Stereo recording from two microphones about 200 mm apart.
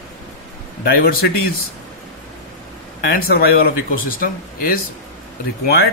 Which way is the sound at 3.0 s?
50° left (ahead or behind).